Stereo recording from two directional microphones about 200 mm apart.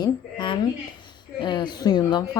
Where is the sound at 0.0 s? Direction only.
25° left (ahead or behind).